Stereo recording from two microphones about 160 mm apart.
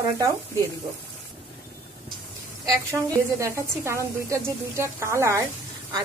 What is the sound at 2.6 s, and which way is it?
A woman's voice, 20° right (ahead or behind).